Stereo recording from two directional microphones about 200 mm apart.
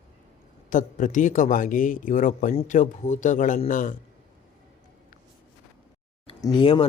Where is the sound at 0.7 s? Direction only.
40° left (ahead or behind).